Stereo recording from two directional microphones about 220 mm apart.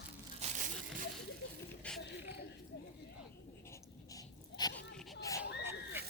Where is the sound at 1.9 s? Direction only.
5° left (ahead or behind).